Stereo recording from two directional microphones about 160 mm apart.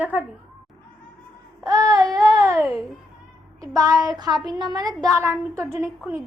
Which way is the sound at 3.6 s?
20° right (ahead or behind).